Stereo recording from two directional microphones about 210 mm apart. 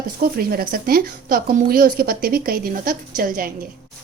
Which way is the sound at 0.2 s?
45° right (ahead or behind).